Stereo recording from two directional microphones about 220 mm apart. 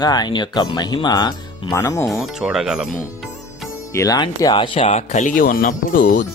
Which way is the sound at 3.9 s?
15° left (ahead or behind).